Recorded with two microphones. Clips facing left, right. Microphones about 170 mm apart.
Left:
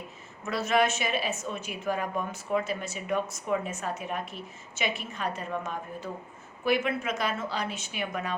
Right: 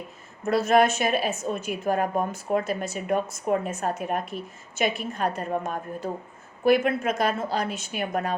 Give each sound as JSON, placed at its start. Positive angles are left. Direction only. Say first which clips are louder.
{"t": 0.4, "sound": "a woman's voice", "louder": "right 6 dB", "side_deg": -45}